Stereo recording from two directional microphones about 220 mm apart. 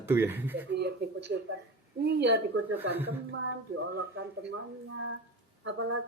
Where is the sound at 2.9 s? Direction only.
10° right (ahead or behind).